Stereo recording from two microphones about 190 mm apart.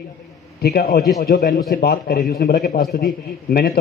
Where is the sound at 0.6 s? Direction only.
55° left (ahead or behind).